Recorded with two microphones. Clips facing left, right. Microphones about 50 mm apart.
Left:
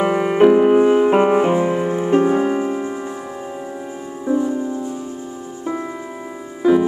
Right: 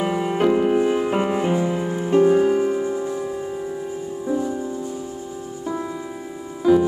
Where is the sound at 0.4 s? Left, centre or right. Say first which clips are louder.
Left 7 dB; left.